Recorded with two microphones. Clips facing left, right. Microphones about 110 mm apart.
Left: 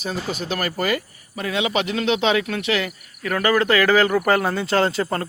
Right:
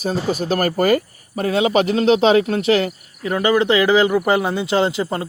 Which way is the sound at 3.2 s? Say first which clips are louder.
Right 3 dB; 20° right (ahead or behind).